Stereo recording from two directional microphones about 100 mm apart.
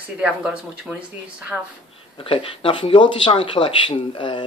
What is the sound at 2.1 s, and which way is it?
Speech, 60° left (ahead or behind).